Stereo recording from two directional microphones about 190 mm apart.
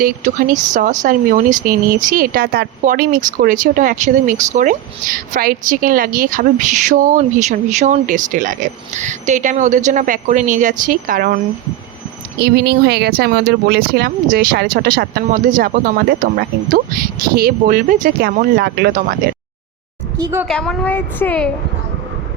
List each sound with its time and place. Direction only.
0.0 s speech: 45° right (ahead or behind)
12.4 s speech: 55° right (ahead or behind)
20.1 s a woman's voice: 20° right (ahead or behind)
20.5 s a woman's voice: 5° left (ahead or behind)